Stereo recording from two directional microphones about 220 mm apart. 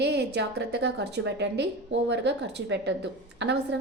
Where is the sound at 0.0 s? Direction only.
50° right (ahead or behind).